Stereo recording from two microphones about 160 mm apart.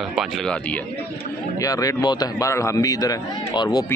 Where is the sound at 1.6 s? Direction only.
20° left (ahead or behind).